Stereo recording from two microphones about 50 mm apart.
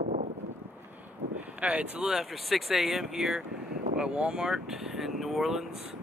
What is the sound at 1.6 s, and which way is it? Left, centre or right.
Speech, right.